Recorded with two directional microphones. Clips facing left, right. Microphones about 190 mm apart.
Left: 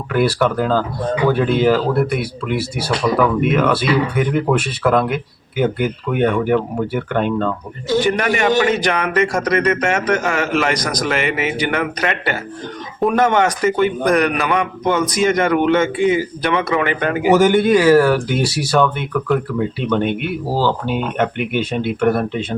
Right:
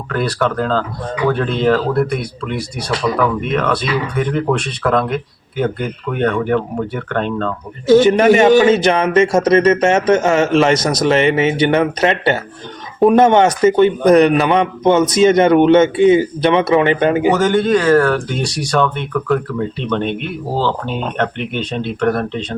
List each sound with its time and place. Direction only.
0.1 s speech: 10° left (ahead or behind)
7.9 s a man's voice: 25° right (ahead or behind)
17.3 s speech: 10° left (ahead or behind)